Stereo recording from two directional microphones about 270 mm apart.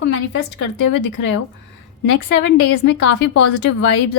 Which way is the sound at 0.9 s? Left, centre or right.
Left.